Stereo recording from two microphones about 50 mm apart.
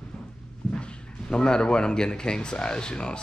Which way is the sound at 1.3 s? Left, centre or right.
Centre.